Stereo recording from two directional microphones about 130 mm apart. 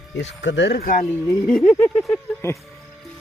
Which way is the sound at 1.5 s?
5° left (ahead or behind).